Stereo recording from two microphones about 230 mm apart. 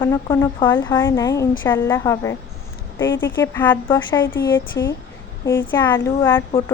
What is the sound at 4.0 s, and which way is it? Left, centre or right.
A woman's voice, centre.